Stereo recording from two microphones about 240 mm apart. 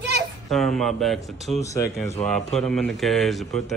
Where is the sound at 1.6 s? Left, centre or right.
Centre.